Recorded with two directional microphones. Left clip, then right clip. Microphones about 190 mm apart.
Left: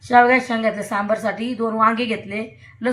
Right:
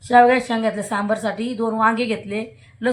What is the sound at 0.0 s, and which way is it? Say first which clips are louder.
A woman's voice: even; 15° right (ahead or behind).